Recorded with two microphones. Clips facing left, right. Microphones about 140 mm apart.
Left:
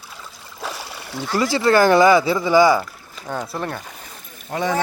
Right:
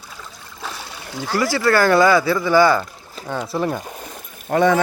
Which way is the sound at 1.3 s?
20° left (ahead or behind).